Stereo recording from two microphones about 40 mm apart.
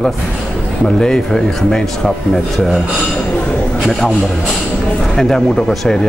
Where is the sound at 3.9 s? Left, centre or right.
Centre.